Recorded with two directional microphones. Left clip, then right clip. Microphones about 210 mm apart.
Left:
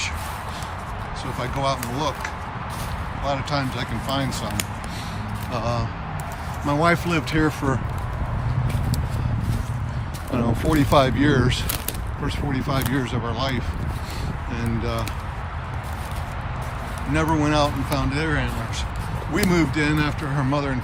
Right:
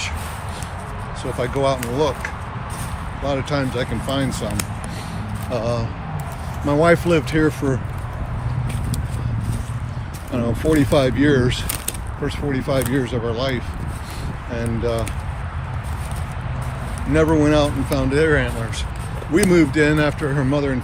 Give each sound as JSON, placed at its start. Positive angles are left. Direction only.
{"t": 1.2, "sound": "speech", "side_deg": 15}
{"t": 5.5, "sound": "speech", "side_deg": 10}
{"t": 10.3, "sound": "speech", "side_deg": 15}
{"t": 17.2, "sound": "speech", "side_deg": 15}
{"t": 20.5, "sound": "speech", "side_deg": 20}